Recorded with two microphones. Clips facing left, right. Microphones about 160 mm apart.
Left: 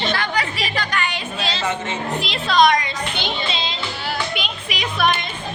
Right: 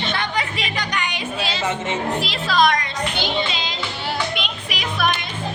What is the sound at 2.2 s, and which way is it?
Speech, 5° right (ahead or behind).